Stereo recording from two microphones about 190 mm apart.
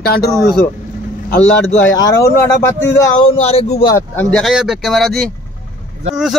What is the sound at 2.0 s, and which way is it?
Speech, 15° left (ahead or behind).